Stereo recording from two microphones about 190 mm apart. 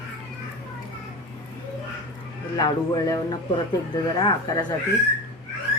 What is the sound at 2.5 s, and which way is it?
Speech, 20° left (ahead or behind).